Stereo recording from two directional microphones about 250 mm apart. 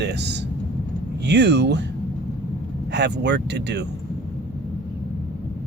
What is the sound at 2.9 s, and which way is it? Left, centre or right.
Speech, right.